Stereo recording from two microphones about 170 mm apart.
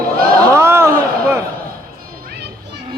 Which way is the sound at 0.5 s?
15° right (ahead or behind).